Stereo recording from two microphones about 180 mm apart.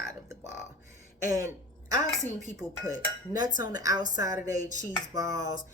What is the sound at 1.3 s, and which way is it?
Speech, 20° right (ahead or behind).